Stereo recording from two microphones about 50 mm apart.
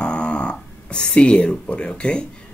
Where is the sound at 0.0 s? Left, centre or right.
Left.